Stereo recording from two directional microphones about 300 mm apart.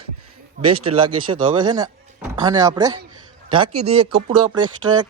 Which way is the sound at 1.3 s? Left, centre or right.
Centre.